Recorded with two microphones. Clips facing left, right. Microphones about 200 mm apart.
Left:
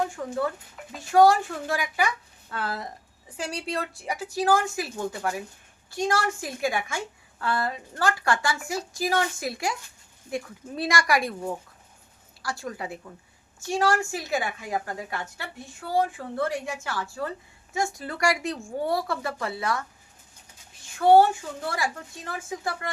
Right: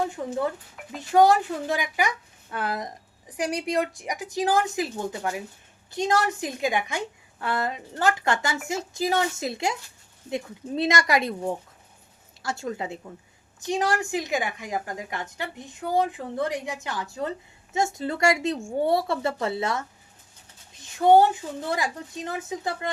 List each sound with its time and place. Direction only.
0.2 s a woman's voice: 25° right (ahead or behind)
21.0 s a woman's voice: 20° right (ahead or behind)